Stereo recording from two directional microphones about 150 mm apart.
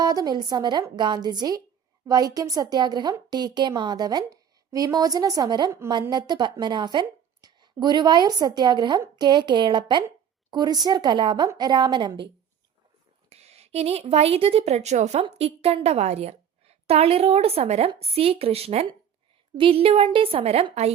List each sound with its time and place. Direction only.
0.0 s speech: 25° right (ahead or behind)
13.3 s a woman's voice: 45° right (ahead or behind)